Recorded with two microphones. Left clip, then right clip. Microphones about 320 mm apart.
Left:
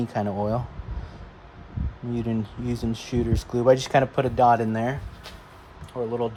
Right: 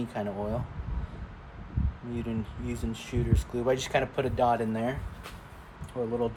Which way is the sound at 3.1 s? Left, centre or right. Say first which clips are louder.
Left 6 dB; left.